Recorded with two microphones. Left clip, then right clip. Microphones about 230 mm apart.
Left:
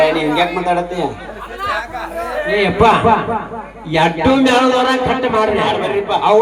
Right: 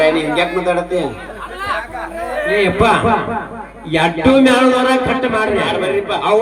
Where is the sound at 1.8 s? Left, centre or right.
Left.